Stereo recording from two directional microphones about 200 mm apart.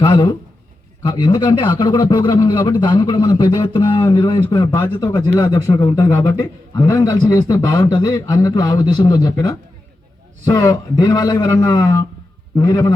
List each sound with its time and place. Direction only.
0.0 s a man's voice: 25° left (ahead or behind)